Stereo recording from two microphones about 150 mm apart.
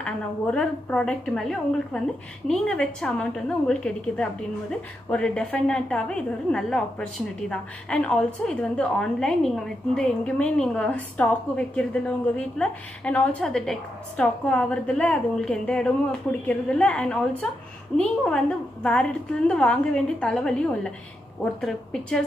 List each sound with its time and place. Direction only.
0.0 s a woman's voice: 10° left (ahead or behind)